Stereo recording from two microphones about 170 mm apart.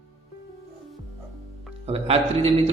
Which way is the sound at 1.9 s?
35° right (ahead or behind).